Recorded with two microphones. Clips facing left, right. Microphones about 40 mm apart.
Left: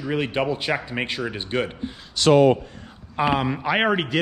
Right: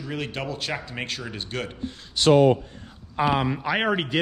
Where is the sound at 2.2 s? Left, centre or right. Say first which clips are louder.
Left 1 dB; left.